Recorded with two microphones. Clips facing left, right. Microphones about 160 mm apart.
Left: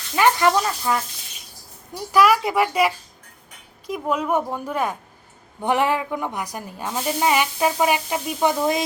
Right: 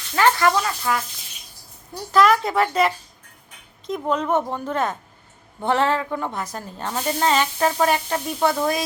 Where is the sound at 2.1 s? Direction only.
10° left (ahead or behind).